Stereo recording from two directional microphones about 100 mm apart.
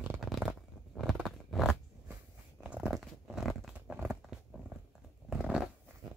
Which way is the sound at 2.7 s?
10° right (ahead or behind).